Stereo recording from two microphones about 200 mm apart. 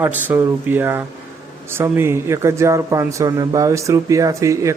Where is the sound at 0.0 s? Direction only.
10° right (ahead or behind).